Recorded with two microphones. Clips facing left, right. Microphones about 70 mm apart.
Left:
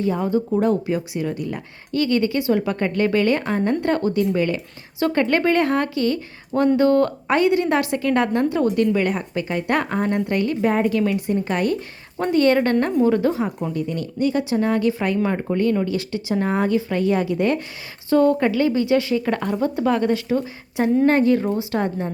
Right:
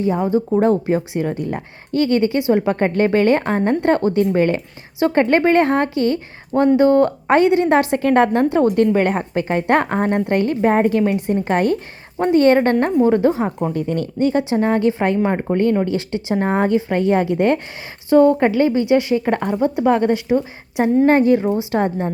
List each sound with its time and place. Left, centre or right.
0.0 s a woman's voice: right
13.7 s a woman's voice: right
14.2 s a woman's voice: right